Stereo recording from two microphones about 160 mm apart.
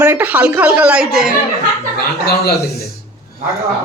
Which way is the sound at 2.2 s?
85° left.